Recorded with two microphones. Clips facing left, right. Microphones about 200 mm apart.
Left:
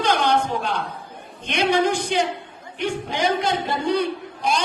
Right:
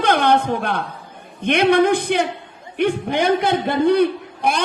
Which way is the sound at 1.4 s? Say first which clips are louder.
Right 5 dB; 55° right (ahead or behind).